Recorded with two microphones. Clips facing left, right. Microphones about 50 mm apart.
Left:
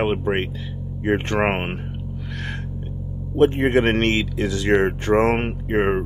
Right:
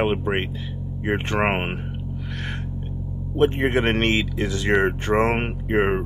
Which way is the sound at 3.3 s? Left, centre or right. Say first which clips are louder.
Left 3 dB; centre.